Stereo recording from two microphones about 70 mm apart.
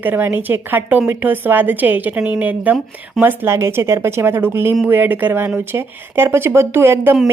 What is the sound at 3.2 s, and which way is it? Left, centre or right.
Speech, right.